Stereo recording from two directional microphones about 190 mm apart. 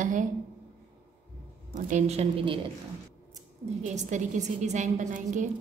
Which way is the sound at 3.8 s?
40° right (ahead or behind).